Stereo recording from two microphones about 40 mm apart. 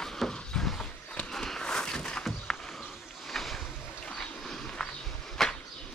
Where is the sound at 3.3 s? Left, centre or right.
Centre.